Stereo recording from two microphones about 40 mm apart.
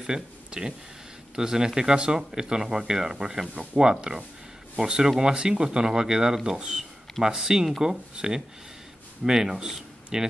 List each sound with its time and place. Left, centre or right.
0.0 s speech: centre
9.2 s speech: centre